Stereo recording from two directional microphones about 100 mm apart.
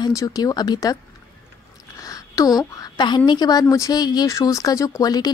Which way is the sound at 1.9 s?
35° left (ahead or behind).